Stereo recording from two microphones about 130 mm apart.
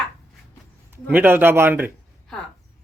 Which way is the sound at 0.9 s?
15° right (ahead or behind).